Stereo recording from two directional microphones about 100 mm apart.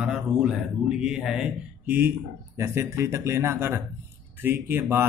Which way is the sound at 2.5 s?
25° right (ahead or behind).